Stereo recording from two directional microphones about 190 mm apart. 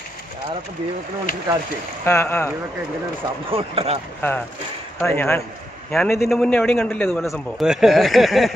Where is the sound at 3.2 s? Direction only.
30° right (ahead or behind).